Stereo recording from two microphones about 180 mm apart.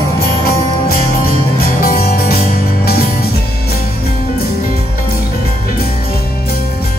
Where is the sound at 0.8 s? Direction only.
55° left (ahead or behind).